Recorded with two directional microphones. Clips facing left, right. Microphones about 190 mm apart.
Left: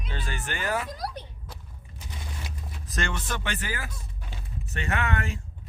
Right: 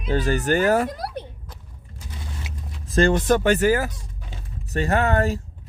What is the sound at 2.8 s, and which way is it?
Speech, 35° right (ahead or behind).